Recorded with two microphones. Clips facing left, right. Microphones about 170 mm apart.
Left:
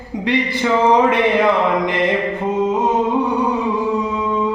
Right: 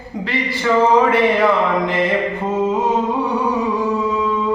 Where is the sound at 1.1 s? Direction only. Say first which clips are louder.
Even; 20° left (ahead or behind).